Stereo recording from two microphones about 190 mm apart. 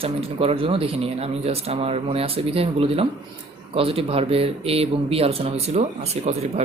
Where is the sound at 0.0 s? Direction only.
30° right (ahead or behind).